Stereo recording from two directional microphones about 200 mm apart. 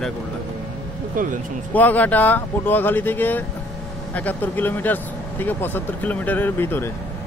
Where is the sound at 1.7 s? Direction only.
10° left (ahead or behind).